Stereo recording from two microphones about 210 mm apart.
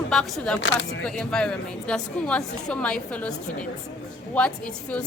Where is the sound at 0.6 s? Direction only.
60° left (ahead or behind).